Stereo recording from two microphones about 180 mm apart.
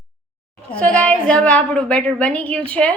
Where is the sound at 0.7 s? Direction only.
5° left (ahead or behind).